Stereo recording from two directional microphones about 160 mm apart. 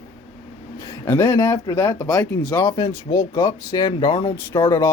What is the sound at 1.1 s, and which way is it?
Speech, 15° left (ahead or behind).